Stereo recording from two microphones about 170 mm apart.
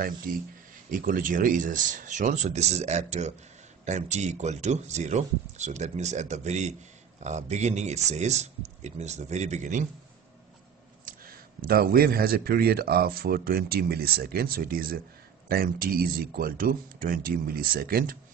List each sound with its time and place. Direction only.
0.3 s speech: 55° right (ahead or behind)
11.1 s speech: 60° right (ahead or behind)